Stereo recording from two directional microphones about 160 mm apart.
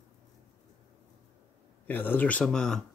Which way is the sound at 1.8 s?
10° left (ahead or behind).